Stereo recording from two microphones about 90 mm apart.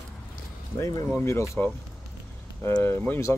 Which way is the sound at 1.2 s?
35° left (ahead or behind).